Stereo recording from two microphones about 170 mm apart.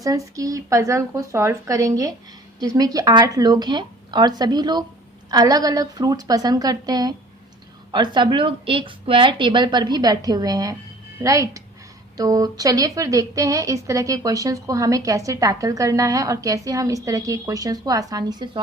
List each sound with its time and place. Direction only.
0.0 s a woman's voice: 20° right (ahead or behind)